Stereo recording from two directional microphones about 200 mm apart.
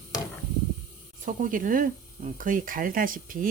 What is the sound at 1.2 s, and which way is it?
Speech, 40° right (ahead or behind).